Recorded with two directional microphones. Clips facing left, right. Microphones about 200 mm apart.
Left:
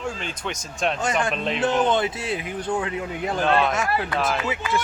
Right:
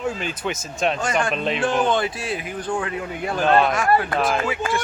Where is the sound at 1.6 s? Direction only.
20° left (ahead or behind).